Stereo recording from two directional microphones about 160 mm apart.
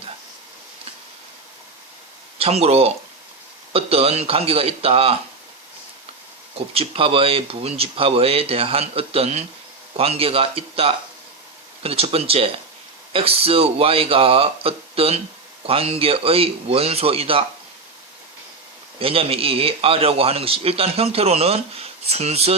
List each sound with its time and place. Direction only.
2.4 s a man's voice: 40° right (ahead or behind)
6.7 s a man's voice: 35° right (ahead or behind)
18.9 s a man's voice: 35° right (ahead or behind)